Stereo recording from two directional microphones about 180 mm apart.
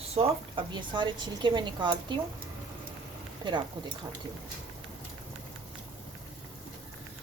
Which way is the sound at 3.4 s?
25° right (ahead or behind).